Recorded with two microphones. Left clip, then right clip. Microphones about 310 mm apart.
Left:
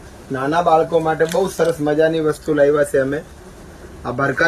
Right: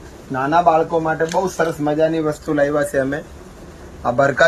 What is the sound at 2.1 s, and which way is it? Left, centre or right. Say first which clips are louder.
Speech: left 2 dB; centre.